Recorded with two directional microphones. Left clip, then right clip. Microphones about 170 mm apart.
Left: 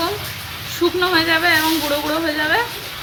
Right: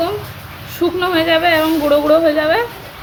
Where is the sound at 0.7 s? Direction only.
60° right (ahead or behind).